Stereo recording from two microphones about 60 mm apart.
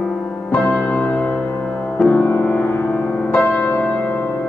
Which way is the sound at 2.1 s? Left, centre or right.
Left.